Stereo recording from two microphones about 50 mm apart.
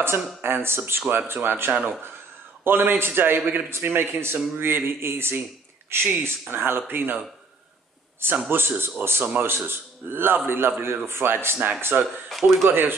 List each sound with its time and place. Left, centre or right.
0.0 s speech: right
8.5 s speech: right
12.3 s speech: centre
12.6 s speech: right